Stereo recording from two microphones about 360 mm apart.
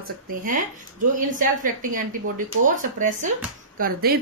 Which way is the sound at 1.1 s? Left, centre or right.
Right.